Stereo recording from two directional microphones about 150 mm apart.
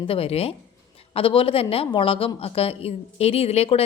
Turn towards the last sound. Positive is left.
turn(degrees=45)  # may be behind; listen again after turning